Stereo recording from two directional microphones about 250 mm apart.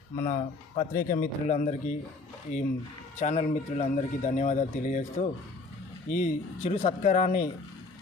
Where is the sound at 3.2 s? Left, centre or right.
Left.